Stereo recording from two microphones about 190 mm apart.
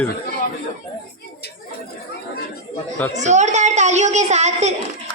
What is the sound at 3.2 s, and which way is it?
A woman's voice, 40° right (ahead or behind).